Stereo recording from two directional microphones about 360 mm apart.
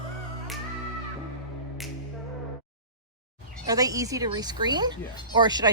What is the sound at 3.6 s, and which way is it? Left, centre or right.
Speech, centre.